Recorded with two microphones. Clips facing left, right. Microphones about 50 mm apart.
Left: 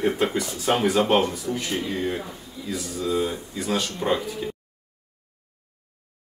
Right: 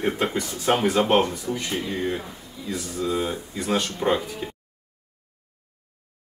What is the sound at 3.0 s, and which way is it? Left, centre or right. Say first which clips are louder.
Speech: left 1 dB; centre.